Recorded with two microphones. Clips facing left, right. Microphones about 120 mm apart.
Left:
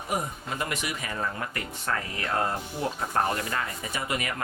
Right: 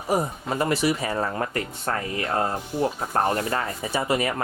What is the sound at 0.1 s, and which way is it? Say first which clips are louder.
Speech: right 7 dB; 35° right (ahead or behind).